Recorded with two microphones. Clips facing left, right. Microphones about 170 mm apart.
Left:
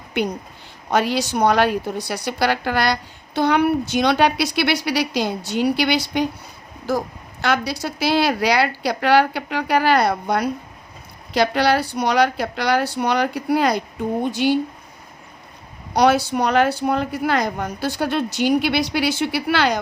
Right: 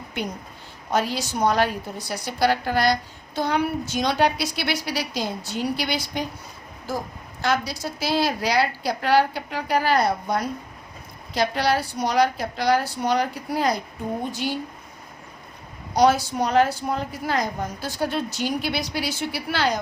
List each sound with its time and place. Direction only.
0.1 s a woman's voice: 75° left (ahead or behind)
7.4 s a woman's voice: 70° left (ahead or behind)
16.0 s a woman's voice: 70° left (ahead or behind)